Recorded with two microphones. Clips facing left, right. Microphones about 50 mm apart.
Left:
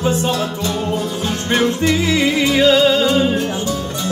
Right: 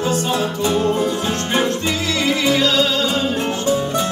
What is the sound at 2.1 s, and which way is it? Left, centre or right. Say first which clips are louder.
Music: left 2 dB; centre.